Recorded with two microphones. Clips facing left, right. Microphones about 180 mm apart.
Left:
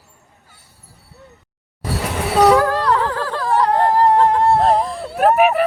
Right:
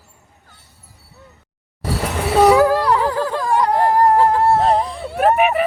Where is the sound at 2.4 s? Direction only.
10° right (ahead or behind).